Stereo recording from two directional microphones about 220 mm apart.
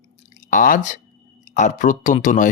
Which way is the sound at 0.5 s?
40° left (ahead or behind).